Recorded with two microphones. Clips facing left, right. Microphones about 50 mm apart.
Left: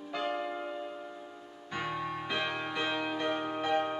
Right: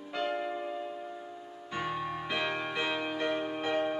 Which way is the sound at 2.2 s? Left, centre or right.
Centre.